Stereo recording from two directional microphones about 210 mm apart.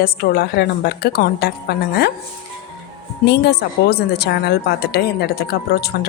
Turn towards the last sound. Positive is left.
turn(degrees=50)  # may be behind; listen again after turning